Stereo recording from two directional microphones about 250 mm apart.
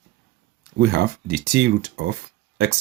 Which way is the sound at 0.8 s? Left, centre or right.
Right.